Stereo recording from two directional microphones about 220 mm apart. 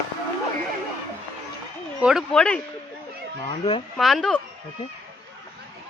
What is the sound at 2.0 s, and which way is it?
Speech, centre (ahead or behind).